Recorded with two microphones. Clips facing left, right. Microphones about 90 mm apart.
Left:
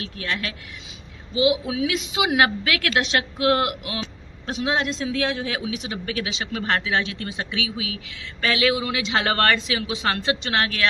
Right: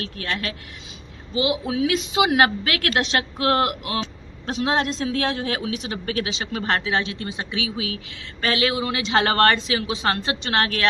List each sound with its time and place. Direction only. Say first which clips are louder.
0.0 s a woman's voice: right 1 dB; 40° right (ahead or behind)